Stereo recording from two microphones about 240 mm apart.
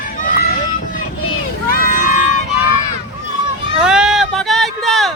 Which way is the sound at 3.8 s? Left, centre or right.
Centre.